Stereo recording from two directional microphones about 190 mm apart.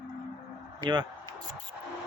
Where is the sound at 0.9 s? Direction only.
20° right (ahead or behind).